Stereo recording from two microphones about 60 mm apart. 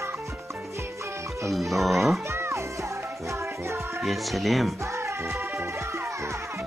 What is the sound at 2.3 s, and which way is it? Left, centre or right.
Music, right.